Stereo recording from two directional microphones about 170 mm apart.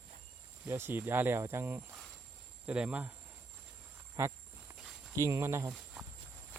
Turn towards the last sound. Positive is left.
turn(degrees=-10)  # may be behind; listen again after turning